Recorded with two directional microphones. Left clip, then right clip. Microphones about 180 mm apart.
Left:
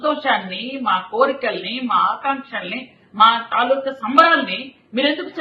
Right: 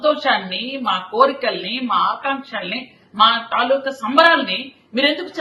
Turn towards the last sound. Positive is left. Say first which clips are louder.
# right 2 dB
turn(degrees=-35)  # may be behind; listen again after turning